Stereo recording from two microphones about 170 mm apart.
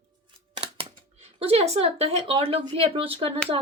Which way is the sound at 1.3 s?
35° right (ahead or behind).